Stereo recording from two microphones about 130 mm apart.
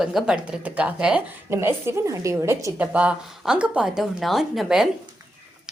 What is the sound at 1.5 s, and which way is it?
A woman's voice, 20° right (ahead or behind).